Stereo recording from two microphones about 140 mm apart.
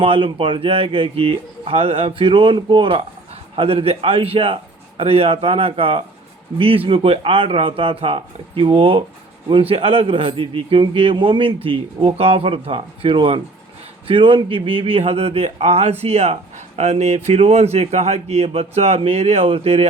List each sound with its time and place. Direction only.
0.0 s a man's voice: 40° right (ahead or behind)